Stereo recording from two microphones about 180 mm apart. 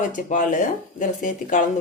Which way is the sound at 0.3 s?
45° left (ahead or behind).